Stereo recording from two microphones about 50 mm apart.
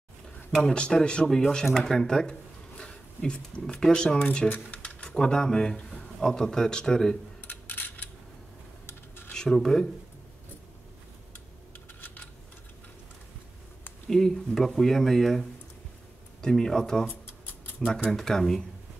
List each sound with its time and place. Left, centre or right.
0.5 s a man's voice: centre
4.5 s speech: left
5.0 s a man's voice: centre
7.4 s a sound: left
8.8 s a sound: left
9.3 s speech: centre
14.0 s a man's voice: centre
17.1 s a sound: left
17.7 s speech: left
18.1 s a man's voice: centre